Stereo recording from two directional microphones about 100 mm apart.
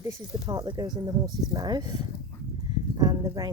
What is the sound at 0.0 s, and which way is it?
Speech, 35° right (ahead or behind).